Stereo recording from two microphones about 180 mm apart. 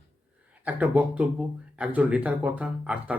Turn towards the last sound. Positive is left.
turn(degrees=-5)  # may be behind; listen again after turning